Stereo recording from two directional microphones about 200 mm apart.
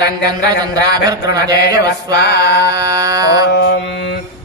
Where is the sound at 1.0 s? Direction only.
15° right (ahead or behind).